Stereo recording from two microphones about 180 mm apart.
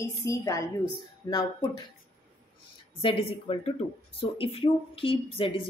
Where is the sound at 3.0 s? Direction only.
30° left (ahead or behind).